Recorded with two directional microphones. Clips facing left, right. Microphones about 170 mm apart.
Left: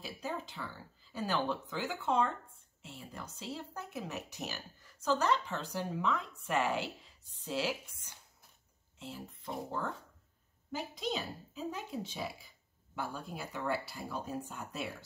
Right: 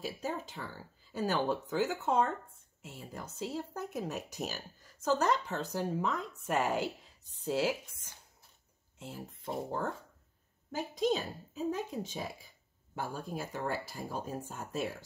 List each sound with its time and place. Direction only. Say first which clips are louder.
0.0 s speech: right 3 dB; 45° right (ahead or behind)
8.9 s speech: right 1 dB; 45° right (ahead or behind)